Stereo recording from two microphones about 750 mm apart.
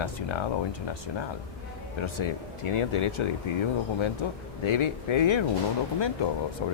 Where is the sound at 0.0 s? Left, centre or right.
Left.